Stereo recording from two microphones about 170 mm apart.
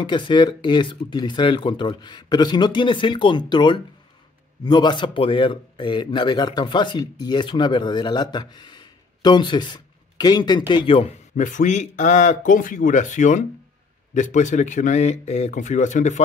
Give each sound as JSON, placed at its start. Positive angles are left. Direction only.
{"t": 0.0, "sound": "a man's voice", "side_deg": 25}
{"t": 11.3, "sound": "speech", "side_deg": 50}